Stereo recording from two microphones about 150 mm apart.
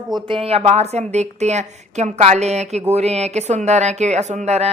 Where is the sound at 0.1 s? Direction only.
35° right (ahead or behind).